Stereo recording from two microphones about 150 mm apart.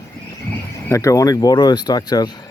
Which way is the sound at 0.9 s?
20° left (ahead or behind).